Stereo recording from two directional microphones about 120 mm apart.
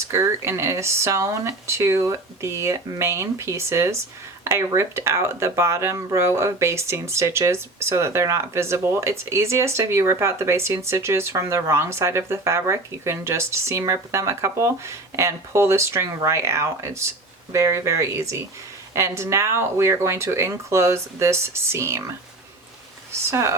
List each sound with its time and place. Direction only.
0.0 s speech: 25° right (ahead or behind)
23.3 s speech: 25° right (ahead or behind)